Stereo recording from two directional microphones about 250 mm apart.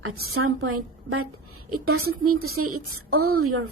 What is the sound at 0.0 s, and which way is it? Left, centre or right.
A woman's voice, right.